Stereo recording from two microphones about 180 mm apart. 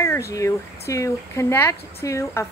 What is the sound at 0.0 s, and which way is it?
Speech, 15° left (ahead or behind).